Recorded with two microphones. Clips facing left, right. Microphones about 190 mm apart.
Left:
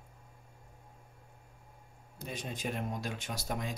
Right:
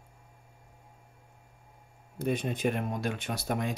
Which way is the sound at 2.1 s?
60° right (ahead or behind).